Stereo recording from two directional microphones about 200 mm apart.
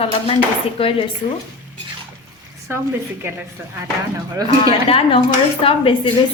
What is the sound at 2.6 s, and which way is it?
A woman's voice, 10° right (ahead or behind).